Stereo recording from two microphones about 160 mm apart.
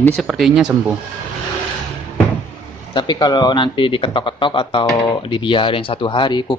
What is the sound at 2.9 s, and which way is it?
Speech, 25° left (ahead or behind).